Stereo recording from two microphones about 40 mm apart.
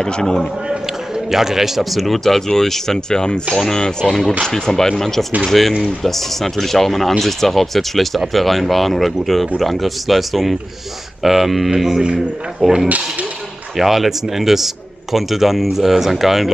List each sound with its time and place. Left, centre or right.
0.0 s speech: centre
1.3 s a man's voice: centre